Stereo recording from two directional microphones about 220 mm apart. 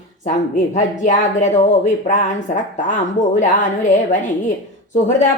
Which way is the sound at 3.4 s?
35° left (ahead or behind).